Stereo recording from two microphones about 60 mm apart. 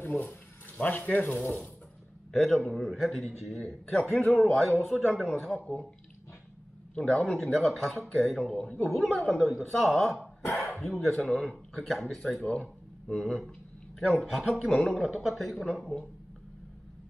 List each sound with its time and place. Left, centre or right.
0.0 s speech: left
2.3 s a man's voice: centre
5.6 s speech: left
7.0 s a man's voice: centre
13.9 s speech: centre